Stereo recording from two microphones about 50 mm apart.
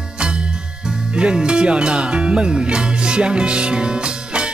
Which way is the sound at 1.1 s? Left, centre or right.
Centre.